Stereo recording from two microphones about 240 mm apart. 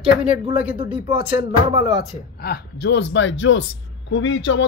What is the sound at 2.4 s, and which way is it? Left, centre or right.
Speech, left.